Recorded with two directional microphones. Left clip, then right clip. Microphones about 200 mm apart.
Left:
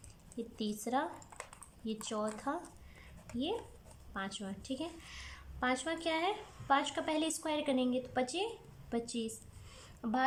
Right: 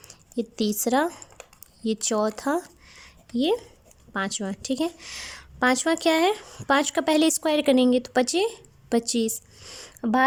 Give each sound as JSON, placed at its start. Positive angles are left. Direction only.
{"t": 0.1, "sound": "a woman's voice", "side_deg": -60}